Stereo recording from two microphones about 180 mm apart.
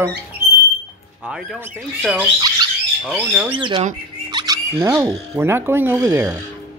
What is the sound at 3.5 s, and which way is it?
Speech, 25° right (ahead or behind).